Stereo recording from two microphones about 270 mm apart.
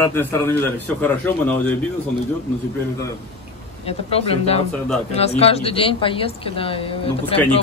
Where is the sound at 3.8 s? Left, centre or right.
Left.